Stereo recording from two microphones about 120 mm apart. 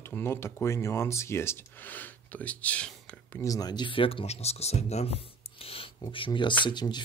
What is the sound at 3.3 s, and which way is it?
Speech, 25° left (ahead or behind).